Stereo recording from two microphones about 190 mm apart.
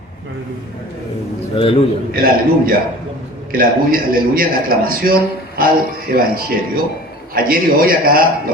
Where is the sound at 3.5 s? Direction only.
50° right (ahead or behind).